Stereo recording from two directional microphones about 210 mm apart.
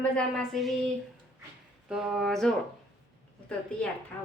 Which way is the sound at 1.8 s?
5° right (ahead or behind).